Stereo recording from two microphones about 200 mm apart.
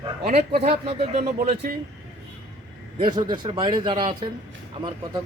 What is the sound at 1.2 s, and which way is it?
Speech, 45° right (ahead or behind).